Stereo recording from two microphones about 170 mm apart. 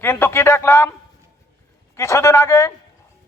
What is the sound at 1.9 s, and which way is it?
Speech, 15° left (ahead or behind).